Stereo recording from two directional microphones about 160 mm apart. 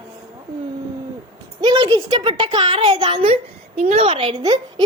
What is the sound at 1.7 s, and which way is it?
Speech, 25° right (ahead or behind).